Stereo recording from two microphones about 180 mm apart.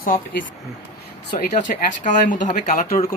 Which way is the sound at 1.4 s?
45° left (ahead or behind).